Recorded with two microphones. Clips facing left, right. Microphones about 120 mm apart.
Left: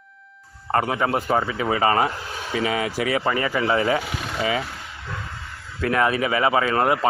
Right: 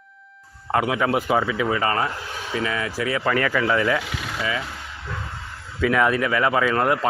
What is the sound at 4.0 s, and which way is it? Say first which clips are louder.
Speech: left 2 dB; 30° left (ahead or behind).